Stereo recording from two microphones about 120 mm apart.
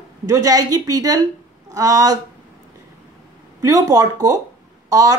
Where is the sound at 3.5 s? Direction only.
30° right (ahead or behind).